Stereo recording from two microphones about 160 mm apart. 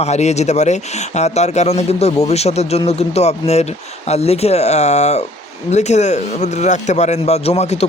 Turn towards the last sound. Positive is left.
turn(degrees=40)  # may be behind; listen again after turning